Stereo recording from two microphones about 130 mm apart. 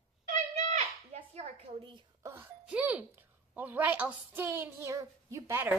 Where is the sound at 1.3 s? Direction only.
55° right (ahead or behind).